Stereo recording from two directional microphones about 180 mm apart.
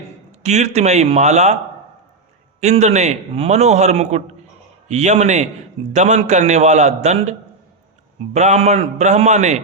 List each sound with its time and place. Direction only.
0.3 s a man's voice: 40° right (ahead or behind)
2.6 s a man's voice: 40° right (ahead or behind)